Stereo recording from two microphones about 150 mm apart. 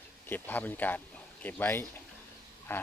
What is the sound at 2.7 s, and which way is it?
Duck, 15° left (ahead or behind).